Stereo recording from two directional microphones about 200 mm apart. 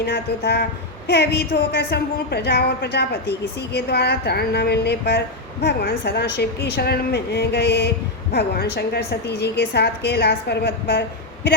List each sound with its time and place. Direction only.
0.0 s a woman's voice: 55° left (ahead or behind)